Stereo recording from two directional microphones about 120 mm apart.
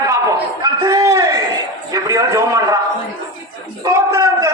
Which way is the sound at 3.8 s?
30° right (ahead or behind).